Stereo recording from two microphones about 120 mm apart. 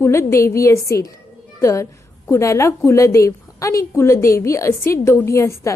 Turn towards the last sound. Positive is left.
turn(degrees=25)  # may be behind; listen again after turning